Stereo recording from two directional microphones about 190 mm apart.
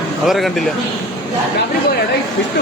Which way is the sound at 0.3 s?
Centre (ahead or behind).